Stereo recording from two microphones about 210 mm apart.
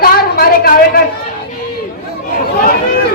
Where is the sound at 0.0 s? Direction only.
45° left (ahead or behind).